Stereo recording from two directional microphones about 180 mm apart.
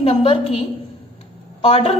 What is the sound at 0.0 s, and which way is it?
Speech, 30° left (ahead or behind).